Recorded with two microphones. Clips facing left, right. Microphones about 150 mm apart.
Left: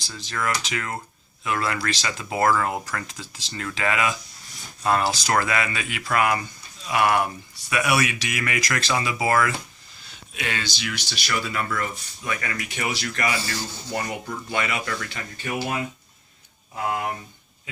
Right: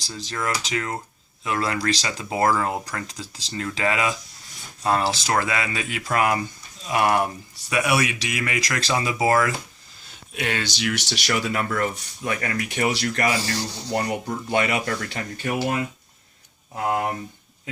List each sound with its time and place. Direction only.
0.6 s speech: 30° right (ahead or behind)
2.1 s speech: 15° right (ahead or behind)
3.1 s speech: 35° right (ahead or behind)
7.7 s speech: 25° right (ahead or behind)
10.3 s speech: 55° right (ahead or behind)
11.7 s speech: 40° right (ahead or behind)